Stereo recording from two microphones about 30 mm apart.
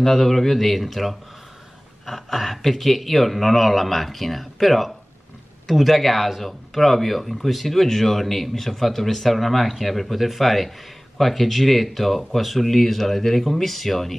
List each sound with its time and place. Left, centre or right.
0.0 s a man's voice: centre